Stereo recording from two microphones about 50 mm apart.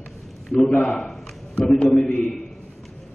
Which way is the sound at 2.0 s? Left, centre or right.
Left.